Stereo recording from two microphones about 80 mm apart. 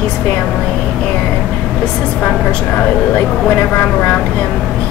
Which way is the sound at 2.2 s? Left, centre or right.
Centre.